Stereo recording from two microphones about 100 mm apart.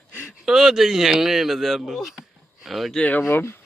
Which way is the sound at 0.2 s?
5° right (ahead or behind).